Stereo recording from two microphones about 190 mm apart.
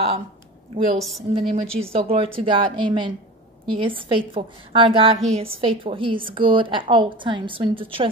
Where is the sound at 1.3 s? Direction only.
25° right (ahead or behind).